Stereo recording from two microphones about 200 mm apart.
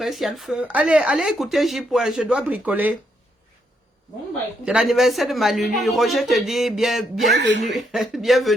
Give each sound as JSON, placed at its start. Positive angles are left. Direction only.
{"t": 0.0, "sound": "speech", "side_deg": 0}
{"t": 4.6, "sound": "speech", "side_deg": -5}
{"t": 7.3, "sound": "speech", "side_deg": -60}
{"t": 7.6, "sound": "speech", "side_deg": 0}